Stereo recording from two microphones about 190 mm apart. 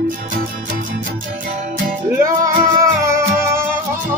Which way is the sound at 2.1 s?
15° right (ahead or behind).